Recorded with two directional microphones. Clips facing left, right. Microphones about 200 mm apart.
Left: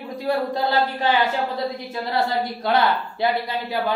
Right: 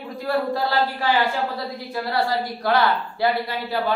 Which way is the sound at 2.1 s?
25° left (ahead or behind).